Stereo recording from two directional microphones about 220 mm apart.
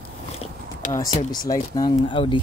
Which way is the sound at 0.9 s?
15° left (ahead or behind).